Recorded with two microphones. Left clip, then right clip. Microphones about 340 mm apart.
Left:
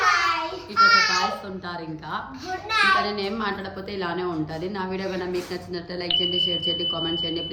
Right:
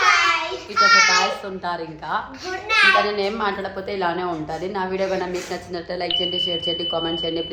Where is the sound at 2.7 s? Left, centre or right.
Centre.